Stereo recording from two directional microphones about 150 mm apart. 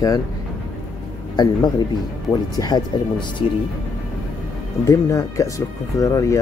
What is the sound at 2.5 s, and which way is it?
Speech, 30° left (ahead or behind).